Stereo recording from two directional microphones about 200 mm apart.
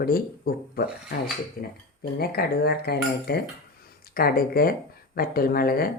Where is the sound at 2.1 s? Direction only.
50° left (ahead or behind).